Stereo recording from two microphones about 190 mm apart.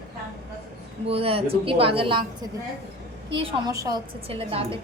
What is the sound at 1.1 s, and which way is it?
A woman's voice, 30° right (ahead or behind).